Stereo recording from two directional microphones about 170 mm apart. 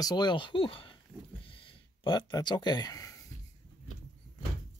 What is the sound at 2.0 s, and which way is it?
Speech, 25° left (ahead or behind).